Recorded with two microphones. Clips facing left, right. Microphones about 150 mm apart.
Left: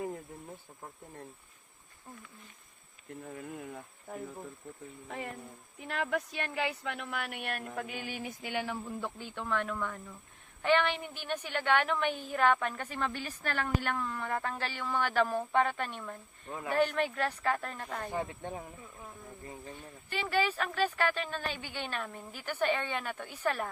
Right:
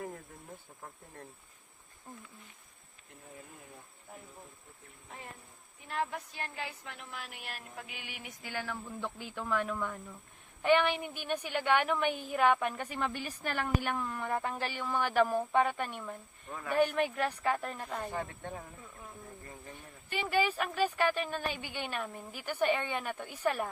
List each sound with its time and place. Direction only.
0.8 s speech: 10° left (ahead or behind)
3.3 s speech: 80° left
5.9 s speech: 80° left; by 7.9 s 60° left (ahead or behind)
7.9 s a sound: 40° left (ahead or behind)
8.4 s speech: 20° left (ahead or behind)
9.0 s a woman's voice: centre (ahead or behind)
16.5 s speech: 20° left (ahead or behind)
16.7 s a woman's voice: 15° right (ahead or behind)
18.1 s speech: 15° left (ahead or behind)
20.1 s a woman's voice: 15° right (ahead or behind)